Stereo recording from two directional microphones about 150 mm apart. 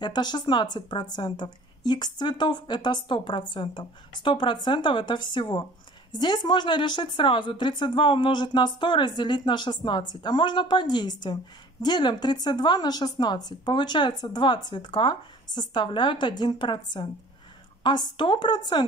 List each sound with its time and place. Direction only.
0.0 s a woman's voice: 30° left (ahead or behind)